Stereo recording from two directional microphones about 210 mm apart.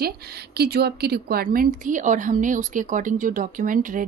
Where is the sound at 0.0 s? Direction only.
50° right (ahead or behind).